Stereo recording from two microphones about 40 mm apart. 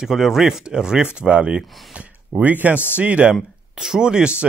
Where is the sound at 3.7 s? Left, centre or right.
Centre.